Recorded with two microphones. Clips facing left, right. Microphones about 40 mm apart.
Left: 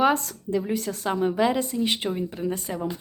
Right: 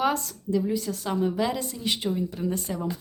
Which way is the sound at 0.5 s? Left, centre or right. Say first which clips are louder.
Even; left.